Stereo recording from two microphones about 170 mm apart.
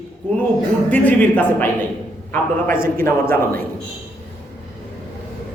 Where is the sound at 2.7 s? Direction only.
55° right (ahead or behind).